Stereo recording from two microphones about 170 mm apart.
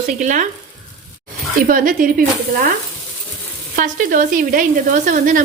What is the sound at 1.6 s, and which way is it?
Speech, 55° right (ahead or behind).